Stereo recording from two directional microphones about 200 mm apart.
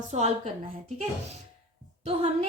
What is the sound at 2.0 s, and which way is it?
Speech, 30° right (ahead or behind).